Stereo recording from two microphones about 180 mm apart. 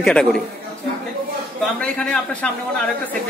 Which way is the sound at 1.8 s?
5° left (ahead or behind).